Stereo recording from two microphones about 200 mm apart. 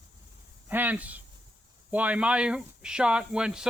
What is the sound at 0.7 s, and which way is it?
Speech, 10° right (ahead or behind).